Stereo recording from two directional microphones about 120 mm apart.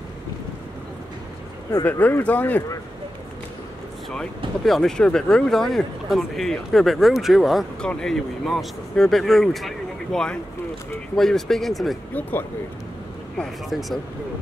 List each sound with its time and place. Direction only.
1.9 s speech: 15° left (ahead or behind)
4.6 s speech: 5° left (ahead or behind)
12.1 s speech: 15° left (ahead or behind)
13.4 s speech: centre (ahead or behind)